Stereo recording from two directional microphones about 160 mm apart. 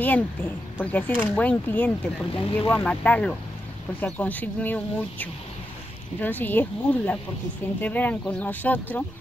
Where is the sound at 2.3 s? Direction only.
35° left (ahead or behind).